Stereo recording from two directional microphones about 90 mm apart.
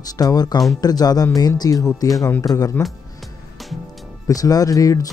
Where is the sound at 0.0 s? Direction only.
45° left (ahead or behind).